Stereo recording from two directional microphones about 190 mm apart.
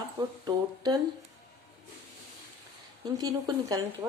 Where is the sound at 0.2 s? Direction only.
20° right (ahead or behind).